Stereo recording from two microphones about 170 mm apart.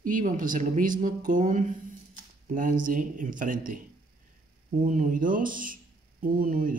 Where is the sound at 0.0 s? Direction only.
50° right (ahead or behind).